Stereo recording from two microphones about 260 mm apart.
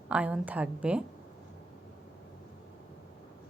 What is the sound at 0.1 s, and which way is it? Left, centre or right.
Speech, centre.